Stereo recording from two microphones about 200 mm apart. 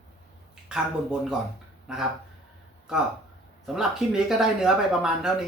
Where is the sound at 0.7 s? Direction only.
5° right (ahead or behind).